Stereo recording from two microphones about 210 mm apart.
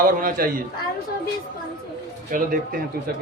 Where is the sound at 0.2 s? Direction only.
45° right (ahead or behind).